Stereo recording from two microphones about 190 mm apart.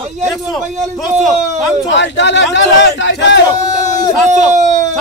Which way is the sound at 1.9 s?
70° left (ahead or behind).